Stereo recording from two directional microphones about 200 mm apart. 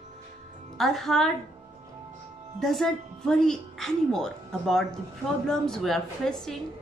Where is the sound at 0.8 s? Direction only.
Centre (ahead or behind).